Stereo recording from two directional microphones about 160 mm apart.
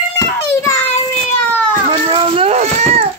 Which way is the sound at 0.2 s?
20° left (ahead or behind).